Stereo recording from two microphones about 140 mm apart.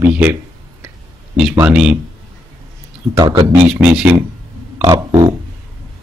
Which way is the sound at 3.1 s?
30° right (ahead or behind).